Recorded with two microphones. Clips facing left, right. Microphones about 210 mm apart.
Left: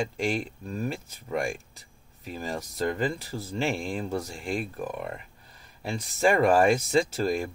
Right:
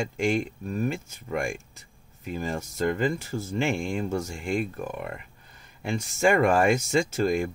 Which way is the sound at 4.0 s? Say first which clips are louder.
Right 2 dB; 35° left (ahead or behind).